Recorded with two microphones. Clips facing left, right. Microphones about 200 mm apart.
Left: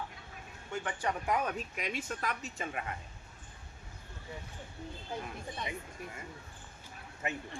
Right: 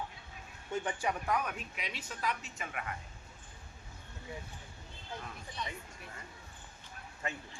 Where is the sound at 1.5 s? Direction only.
40° left (ahead or behind).